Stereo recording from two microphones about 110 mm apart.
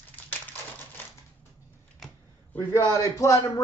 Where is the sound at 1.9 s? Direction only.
10° left (ahead or behind).